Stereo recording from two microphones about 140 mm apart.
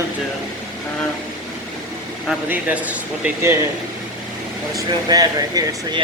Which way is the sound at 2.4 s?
10° right (ahead or behind).